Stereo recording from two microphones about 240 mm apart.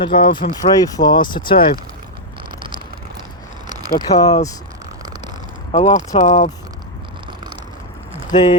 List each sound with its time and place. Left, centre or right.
0.0 s speech: left
4.0 s speech: centre
5.7 s speech: left
8.1 s a sound: centre